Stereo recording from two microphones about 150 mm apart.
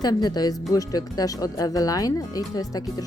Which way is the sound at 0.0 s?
25° left (ahead or behind).